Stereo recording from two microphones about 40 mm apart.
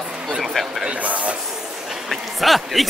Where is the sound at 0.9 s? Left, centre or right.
Right.